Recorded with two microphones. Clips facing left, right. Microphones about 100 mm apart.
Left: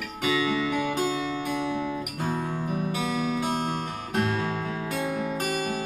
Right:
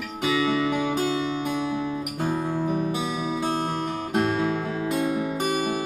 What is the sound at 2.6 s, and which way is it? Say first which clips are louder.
Music: right 4 dB; 15° right (ahead or behind).